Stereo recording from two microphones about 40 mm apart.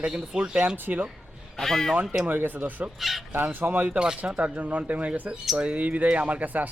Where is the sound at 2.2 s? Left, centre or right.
Right.